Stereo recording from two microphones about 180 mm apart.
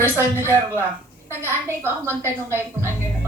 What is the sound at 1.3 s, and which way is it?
A woman's voice, 15° right (ahead or behind).